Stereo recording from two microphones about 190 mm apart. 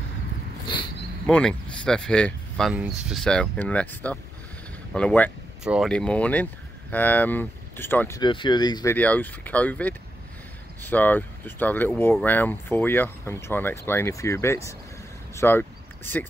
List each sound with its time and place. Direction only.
1.2 s speech: 5° left (ahead or behind)
8.2 s speech: 25° left (ahead or behind)
8.9 s speech: 10° left (ahead or behind)
15.3 s a sound: 10° left (ahead or behind)